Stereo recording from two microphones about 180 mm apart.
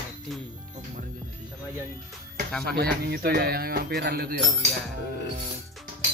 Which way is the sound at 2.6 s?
60° right (ahead or behind).